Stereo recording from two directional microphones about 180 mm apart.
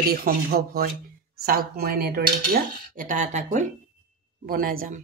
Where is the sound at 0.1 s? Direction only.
55° right (ahead or behind).